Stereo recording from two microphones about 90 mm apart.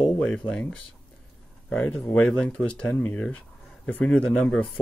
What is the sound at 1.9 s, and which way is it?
Speech, 10° left (ahead or behind).